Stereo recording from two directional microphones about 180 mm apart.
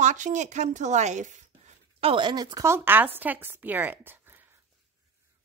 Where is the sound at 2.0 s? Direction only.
25° right (ahead or behind); by 4.1 s 10° right (ahead or behind).